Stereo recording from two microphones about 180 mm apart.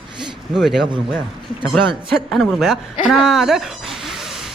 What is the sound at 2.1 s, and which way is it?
Speech, centre (ahead or behind).